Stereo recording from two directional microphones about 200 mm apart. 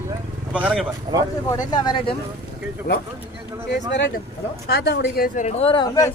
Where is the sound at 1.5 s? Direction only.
20° left (ahead or behind).